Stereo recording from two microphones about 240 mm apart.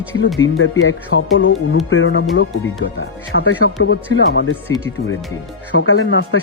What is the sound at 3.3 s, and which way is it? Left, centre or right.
Speech, left.